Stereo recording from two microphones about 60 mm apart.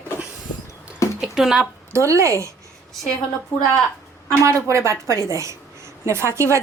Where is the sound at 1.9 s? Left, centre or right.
Right.